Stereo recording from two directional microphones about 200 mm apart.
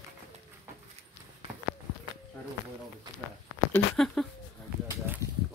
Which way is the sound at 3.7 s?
Centre (ahead or behind).